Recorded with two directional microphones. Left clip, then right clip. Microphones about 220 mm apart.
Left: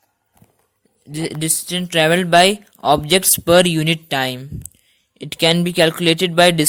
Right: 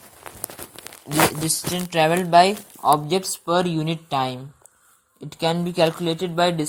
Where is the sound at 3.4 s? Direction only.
55° left (ahead or behind).